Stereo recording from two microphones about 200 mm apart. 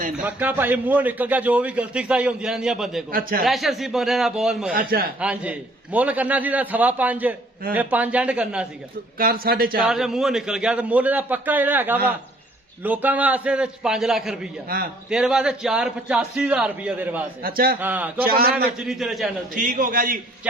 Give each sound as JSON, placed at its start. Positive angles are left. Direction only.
{"t": 0.2, "sound": "a man's voice", "side_deg": -10}
{"t": 3.1, "sound": "a man's voice", "side_deg": -45}
{"t": 3.4, "sound": "a man's voice", "side_deg": 0}
{"t": 4.7, "sound": "a man's voice", "side_deg": -45}
{"t": 5.2, "sound": "a man's voice", "side_deg": -5}
{"t": 9.1, "sound": "a man's voice", "side_deg": -45}
{"t": 9.8, "sound": "a man's voice", "side_deg": 0}
{"t": 14.7, "sound": "a man's voice", "side_deg": -45}
{"t": 15.1, "sound": "a man's voice", "side_deg": -5}
{"t": 17.4, "sound": "a man's voice", "side_deg": -50}
{"t": 17.7, "sound": "a man's voice", "side_deg": -10}
{"t": 18.3, "sound": "a man's voice", "side_deg": -50}
{"t": 18.8, "sound": "a man's voice", "side_deg": 0}
{"t": 19.5, "sound": "a man's voice", "side_deg": -40}